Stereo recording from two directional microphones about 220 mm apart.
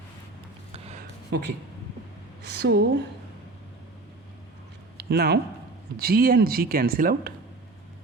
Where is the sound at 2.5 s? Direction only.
50° right (ahead or behind).